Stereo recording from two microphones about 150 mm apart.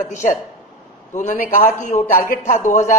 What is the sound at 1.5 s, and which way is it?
A man's voice, 60° left (ahead or behind).